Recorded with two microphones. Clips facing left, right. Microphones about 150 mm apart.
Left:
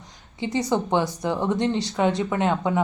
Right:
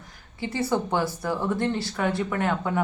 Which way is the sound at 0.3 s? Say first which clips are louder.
Left 2 dB; 20° left (ahead or behind).